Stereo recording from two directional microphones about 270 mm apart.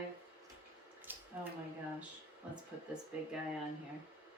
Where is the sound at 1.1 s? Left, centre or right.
Centre.